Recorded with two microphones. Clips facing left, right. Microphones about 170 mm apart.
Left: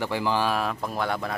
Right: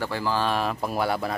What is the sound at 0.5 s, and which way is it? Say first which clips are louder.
Speech: right 2 dB; 5° right (ahead or behind).